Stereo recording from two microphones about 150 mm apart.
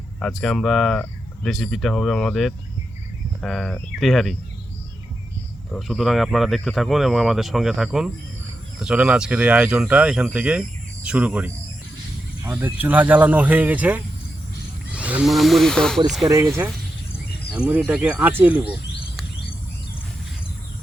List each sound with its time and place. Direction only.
0.2 s speech: 5° left (ahead or behind)
5.7 s speech: centre (ahead or behind)
16.2 s speech: 20° right (ahead or behind)
17.5 s speech: 10° right (ahead or behind)